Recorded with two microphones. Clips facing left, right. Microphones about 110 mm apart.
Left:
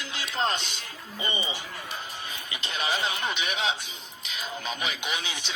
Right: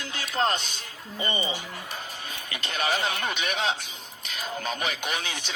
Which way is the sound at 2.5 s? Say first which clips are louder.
Right 3 dB; 50° right (ahead or behind).